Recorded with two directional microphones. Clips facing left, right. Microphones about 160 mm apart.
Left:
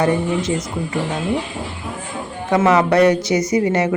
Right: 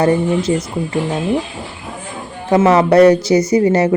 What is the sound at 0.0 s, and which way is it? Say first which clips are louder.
Speech: right 4 dB; 30° right (ahead or behind).